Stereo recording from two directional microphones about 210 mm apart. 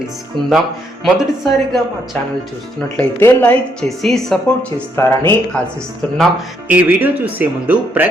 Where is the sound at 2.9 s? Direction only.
10° left (ahead or behind).